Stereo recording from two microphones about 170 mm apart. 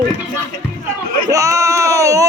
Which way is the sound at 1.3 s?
20° right (ahead or behind).